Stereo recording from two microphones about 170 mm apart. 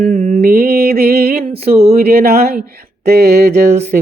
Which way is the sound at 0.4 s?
65° right (ahead or behind).